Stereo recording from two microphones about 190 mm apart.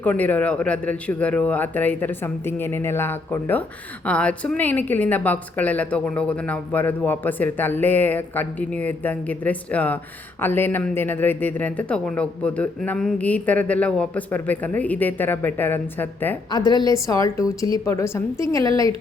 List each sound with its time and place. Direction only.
0.0 s a man's voice: 10° left (ahead or behind)
16.5 s a woman's voice: 20° left (ahead or behind)